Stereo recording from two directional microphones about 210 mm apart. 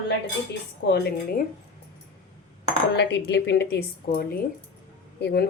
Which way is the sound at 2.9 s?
55° left (ahead or behind).